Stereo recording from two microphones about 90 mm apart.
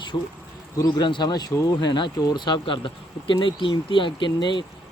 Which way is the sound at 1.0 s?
60° left (ahead or behind).